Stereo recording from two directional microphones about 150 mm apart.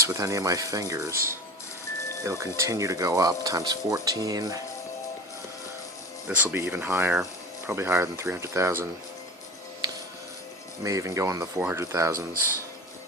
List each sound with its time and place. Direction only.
0.0 s speech: 20° right (ahead or behind)
1.1 s speech: 75° right (ahead or behind)
2.2 s speech: 20° right (ahead or behind)
6.2 s speech: 10° right (ahead or behind)
10.8 s speech: 20° right (ahead or behind)